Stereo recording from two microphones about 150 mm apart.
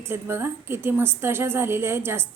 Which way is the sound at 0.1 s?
15° right (ahead or behind).